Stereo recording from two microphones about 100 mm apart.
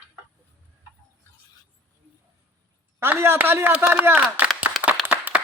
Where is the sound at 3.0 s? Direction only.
25° right (ahead or behind).